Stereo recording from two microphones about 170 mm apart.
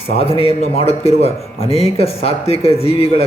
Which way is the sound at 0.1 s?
35° left (ahead or behind).